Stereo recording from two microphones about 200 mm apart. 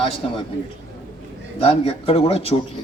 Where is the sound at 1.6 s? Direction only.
30° left (ahead or behind).